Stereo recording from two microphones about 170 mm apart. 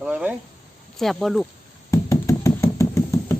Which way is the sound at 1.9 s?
20° left (ahead or behind).